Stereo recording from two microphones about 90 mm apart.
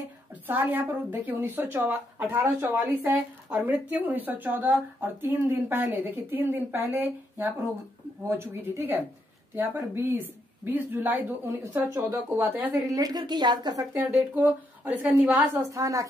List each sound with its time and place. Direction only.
0.5 s speech: 20° right (ahead or behind)
2.4 s speech: 30° right (ahead or behind)
2.9 s speech: 20° right (ahead or behind)
10.0 s speech: 25° right (ahead or behind)
11.9 s speech: 40° right (ahead or behind)
12.4 s speech: 20° right (ahead or behind)
12.7 s a woman's voice: 45° right (ahead or behind)
14.1 s speech: 20° right (ahead or behind)
15.7 s speech: 35° right (ahead or behind)